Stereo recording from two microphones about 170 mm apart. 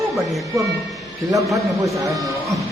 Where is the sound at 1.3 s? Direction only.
20° right (ahead or behind).